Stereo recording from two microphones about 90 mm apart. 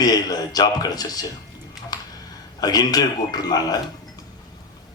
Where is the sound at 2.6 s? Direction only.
45° left (ahead or behind).